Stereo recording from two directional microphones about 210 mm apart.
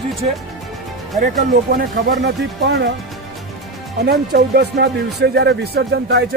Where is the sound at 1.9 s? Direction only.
50° right (ahead or behind).